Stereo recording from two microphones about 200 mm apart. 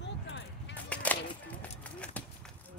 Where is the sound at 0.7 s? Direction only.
5° left (ahead or behind).